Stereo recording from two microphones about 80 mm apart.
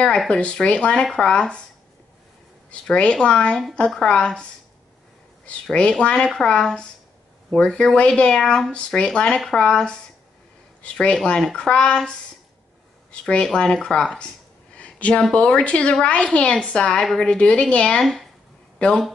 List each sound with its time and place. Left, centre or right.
0.3 s a woman's voice: centre
2.7 s a woman's voice: centre
14.8 s a sound: centre
15.3 s a woman's voice: centre